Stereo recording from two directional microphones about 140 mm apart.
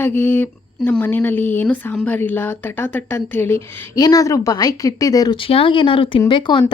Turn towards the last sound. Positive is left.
turn(degrees=35)  # may be behind; listen again after turning